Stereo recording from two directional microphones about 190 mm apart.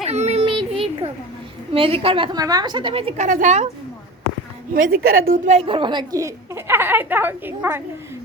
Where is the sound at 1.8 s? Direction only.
30° right (ahead or behind).